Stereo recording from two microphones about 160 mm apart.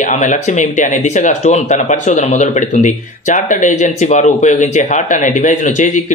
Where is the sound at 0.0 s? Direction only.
50° left (ahead or behind).